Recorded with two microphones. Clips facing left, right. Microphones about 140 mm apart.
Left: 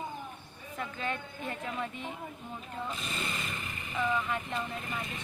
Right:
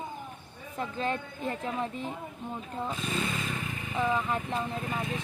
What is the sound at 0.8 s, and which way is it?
A woman's voice, 35° right (ahead or behind).